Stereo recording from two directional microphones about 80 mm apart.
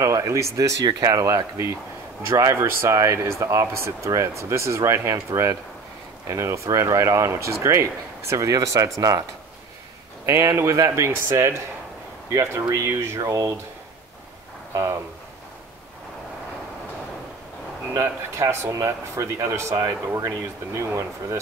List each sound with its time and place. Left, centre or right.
0.0 s speech: right
10.2 s speech: right
13.2 s speech: right
14.7 s speech: right
17.9 s speech: right